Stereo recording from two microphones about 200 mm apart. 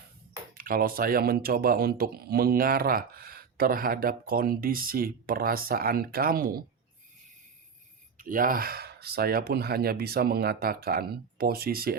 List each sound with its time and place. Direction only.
0.5 s speech: 45° right (ahead or behind)
8.2 s speech: 45° right (ahead or behind)